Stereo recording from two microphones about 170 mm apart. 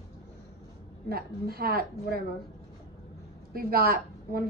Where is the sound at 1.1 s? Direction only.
65° right (ahead or behind).